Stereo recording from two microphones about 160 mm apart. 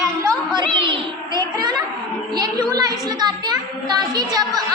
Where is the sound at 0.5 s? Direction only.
30° right (ahead or behind).